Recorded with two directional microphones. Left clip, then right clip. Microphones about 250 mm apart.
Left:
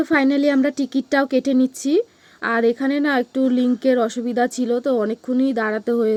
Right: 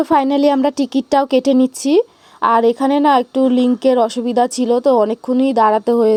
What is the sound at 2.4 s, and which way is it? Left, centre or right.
Speech, right.